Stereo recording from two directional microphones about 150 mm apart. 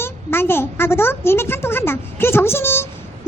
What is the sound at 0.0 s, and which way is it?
Speech, 15° left (ahead or behind).